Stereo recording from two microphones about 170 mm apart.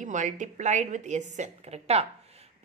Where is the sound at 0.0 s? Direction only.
45° right (ahead or behind).